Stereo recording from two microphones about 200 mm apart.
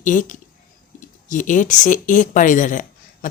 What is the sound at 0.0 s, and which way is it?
A woman's voice, 40° left (ahead or behind).